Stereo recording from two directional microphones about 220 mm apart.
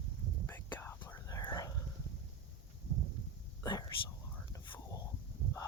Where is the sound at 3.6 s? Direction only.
20° left (ahead or behind).